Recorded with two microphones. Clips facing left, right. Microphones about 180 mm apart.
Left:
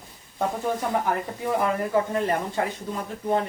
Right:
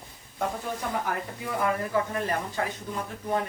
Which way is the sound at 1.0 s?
25° left (ahead or behind).